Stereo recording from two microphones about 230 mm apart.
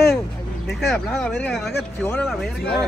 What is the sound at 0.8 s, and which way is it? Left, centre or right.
Speech, centre.